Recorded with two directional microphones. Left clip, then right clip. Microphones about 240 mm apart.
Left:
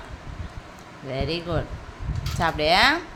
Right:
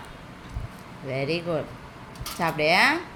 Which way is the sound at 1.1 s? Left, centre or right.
Left.